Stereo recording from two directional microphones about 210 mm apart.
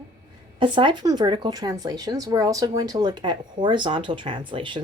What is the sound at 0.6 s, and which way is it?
Speech, 25° right (ahead or behind).